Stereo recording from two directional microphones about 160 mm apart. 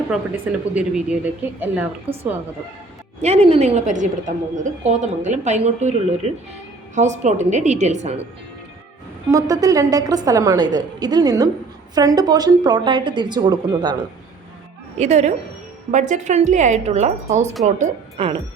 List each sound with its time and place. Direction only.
0.1 s a woman's voice: 10° right (ahead or behind)
3.2 s speech: 40° right (ahead or behind)
9.3 s a woman's voice: 20° right (ahead or behind)
14.9 s a woman's voice: 45° right (ahead or behind)